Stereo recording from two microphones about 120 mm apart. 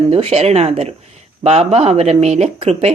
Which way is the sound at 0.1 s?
55° right (ahead or behind).